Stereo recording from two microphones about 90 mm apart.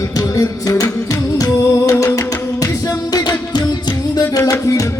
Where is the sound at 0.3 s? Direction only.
40° left (ahead or behind).